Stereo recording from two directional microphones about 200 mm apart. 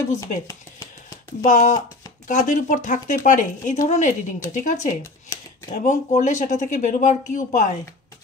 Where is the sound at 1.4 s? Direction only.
40° left (ahead or behind).